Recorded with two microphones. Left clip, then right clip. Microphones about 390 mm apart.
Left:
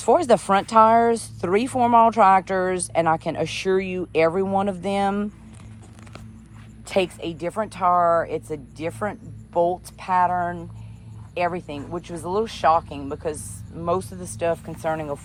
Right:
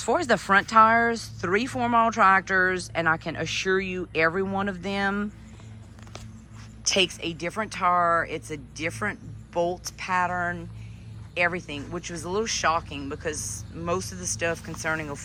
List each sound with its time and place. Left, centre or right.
0.0 s speech: centre
6.9 s speech: centre